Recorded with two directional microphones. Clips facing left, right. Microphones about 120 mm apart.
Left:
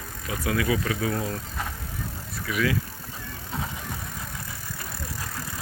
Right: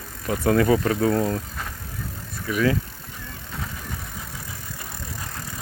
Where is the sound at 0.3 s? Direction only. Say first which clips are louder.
Right 7 dB; 45° right (ahead or behind).